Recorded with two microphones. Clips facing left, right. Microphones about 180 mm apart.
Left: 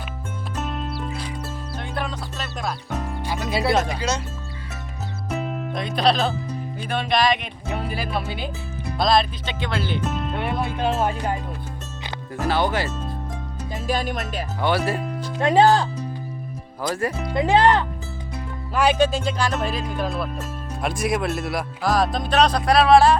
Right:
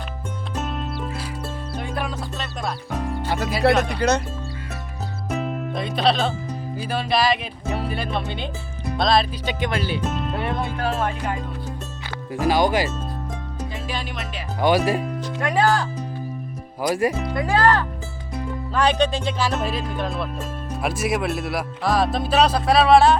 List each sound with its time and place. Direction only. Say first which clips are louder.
0.5 s music: right 1 dB; centre (ahead or behind)
3.6 s speech: right 4 dB; 65° right (ahead or behind)
5.3 s music: right 1 dB; centre (ahead or behind)
6.7 s speech: even; 5° right (ahead or behind)
9.5 s speech: right 2 dB; 15° right (ahead or behind)
10.1 s speech: even; centre (ahead or behind)
10.6 s music: left 5 dB; 20° left (ahead or behind)
12.3 s speech: right 3 dB; 10° right (ahead or behind)
13.8 s speech: left 5 dB; 45° left (ahead or behind)
14.6 s speech: right 4 dB; 15° right (ahead or behind)
15.4 s music: left 4 dB; 25° left (ahead or behind)
16.8 s speech: right 4 dB; 15° right (ahead or behind)
17.3 s music: left 5 dB; 20° left (ahead or behind)
18.7 s speech: left 1 dB; 10° left (ahead or behind)